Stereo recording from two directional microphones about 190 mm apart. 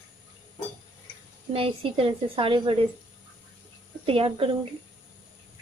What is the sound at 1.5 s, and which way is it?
A woman's voice, 30° right (ahead or behind).